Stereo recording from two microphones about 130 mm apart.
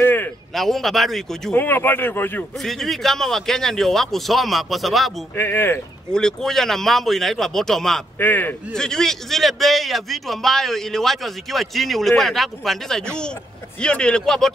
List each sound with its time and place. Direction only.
0.0 s a sound: 15° left (ahead or behind)
0.6 s a man's voice: centre (ahead or behind)
1.5 s speech: 15° left (ahead or behind)
2.6 s a man's voice: centre (ahead or behind)
5.3 s speech: 15° left (ahead or behind)
6.1 s a man's voice: 5° left (ahead or behind)
8.2 s speech: 15° left (ahead or behind)
8.8 s a man's voice: 5° left (ahead or behind)